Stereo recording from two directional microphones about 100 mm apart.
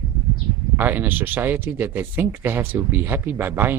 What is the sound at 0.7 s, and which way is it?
Speech, 20° right (ahead or behind).